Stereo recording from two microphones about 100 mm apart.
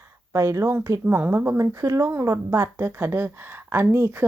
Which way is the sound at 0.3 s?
30° right (ahead or behind).